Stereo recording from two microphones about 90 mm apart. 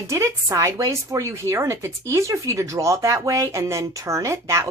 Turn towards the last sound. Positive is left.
turn(degrees=-35)  # may be behind; listen again after turning